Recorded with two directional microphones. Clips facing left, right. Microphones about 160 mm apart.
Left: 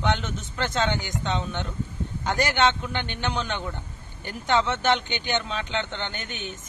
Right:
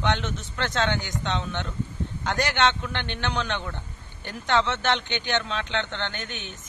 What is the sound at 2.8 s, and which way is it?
Speech, 5° left (ahead or behind).